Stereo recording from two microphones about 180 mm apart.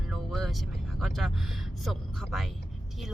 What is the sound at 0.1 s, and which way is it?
Music, centre (ahead or behind).